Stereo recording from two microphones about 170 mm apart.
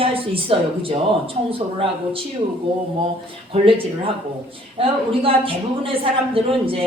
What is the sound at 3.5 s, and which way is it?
A woman's voice, 30° right (ahead or behind).